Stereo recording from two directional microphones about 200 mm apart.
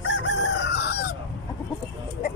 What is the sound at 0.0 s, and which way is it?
Chicken, 60° left (ahead or behind).